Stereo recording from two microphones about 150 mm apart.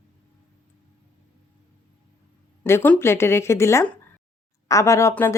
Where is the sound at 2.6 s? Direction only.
10° left (ahead or behind).